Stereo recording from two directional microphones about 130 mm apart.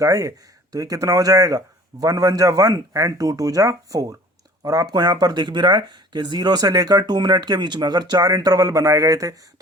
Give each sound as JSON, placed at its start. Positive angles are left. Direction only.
{"t": 0.0, "sound": "speech", "side_deg": -25}